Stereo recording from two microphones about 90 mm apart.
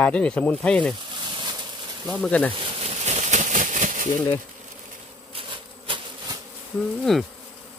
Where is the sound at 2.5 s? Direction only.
90° right.